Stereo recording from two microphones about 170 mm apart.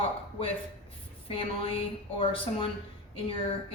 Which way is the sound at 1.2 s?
30° left (ahead or behind).